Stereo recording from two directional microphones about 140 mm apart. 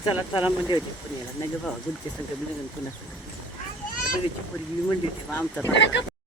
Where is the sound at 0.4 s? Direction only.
10° right (ahead or behind).